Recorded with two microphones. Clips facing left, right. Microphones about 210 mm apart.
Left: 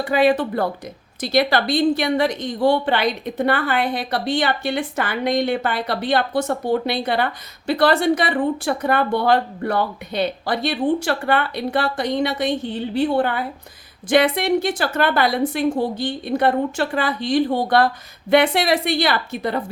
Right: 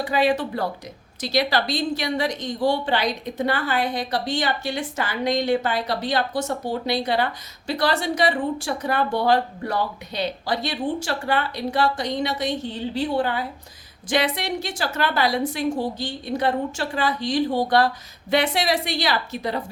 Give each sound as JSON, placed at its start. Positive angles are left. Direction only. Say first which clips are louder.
{"t": 0.0, "sound": "a woman's voice", "louder": "left 4 dB", "side_deg": 55}